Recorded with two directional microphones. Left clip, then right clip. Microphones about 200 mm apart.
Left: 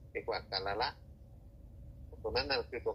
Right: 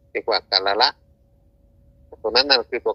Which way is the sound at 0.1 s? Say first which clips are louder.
Right 17 dB; 45° right (ahead or behind).